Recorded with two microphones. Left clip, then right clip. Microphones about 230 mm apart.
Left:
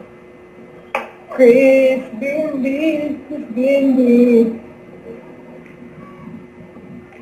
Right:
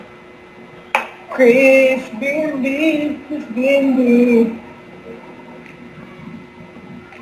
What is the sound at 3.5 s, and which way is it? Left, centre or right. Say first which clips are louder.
Speech: even; right.